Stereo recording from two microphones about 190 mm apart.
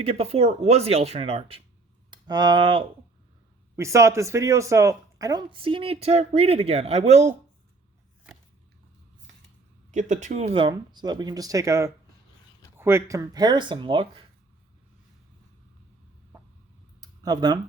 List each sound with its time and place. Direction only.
0.0 s speech: 30° right (ahead or behind)
2.0 s speech: 20° right (ahead or behind); by 7.3 s 35° right (ahead or behind)
9.9 s speech: 40° right (ahead or behind)
17.0 s a sound: 20° right (ahead or behind)